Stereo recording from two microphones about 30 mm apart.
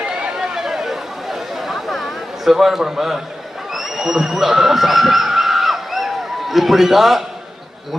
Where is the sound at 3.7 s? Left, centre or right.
Centre.